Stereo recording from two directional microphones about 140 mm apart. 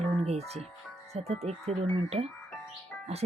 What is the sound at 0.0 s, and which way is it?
Music, 50° right (ahead or behind).